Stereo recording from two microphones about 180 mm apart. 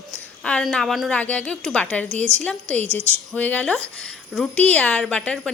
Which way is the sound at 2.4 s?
5° left (ahead or behind).